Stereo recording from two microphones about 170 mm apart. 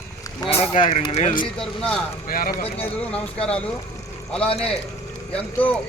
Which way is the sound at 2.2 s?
55° left (ahead or behind).